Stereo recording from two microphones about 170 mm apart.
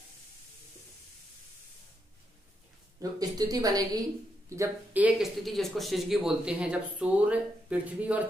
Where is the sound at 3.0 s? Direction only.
20° right (ahead or behind).